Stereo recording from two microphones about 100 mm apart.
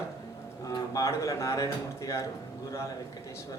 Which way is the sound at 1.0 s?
30° left (ahead or behind).